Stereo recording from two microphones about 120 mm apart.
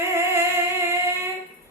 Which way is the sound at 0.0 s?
20° right (ahead or behind).